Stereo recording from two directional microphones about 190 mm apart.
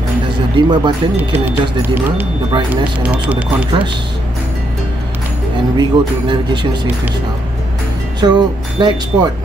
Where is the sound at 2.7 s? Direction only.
5° right (ahead or behind).